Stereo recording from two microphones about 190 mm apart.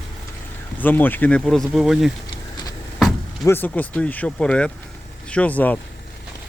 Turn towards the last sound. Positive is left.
turn(degrees=10)  # may be behind; listen again after turning